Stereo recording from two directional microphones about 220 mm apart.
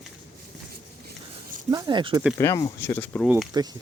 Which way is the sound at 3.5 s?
15° right (ahead or behind).